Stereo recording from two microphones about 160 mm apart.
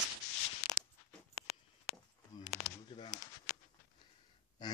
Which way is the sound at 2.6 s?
35° left (ahead or behind).